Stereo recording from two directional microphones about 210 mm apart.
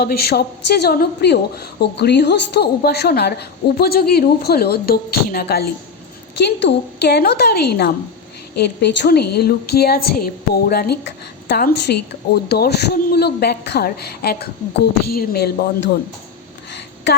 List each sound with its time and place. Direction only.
0.0 s a woman's voice: 50° left (ahead or behind)